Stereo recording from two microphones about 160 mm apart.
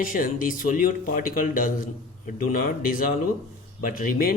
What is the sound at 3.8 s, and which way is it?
Speech, 60° left (ahead or behind).